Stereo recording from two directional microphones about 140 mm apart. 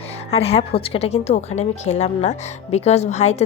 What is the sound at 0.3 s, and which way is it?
A woman's voice, 45° left (ahead or behind).